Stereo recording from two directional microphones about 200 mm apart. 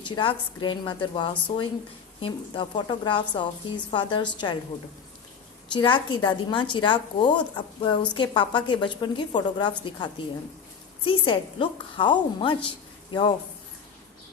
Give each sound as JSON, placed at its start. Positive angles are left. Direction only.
{"t": 0.0, "sound": "a woman's voice", "side_deg": 25}
{"t": 5.7, "sound": "a woman's voice", "side_deg": 25}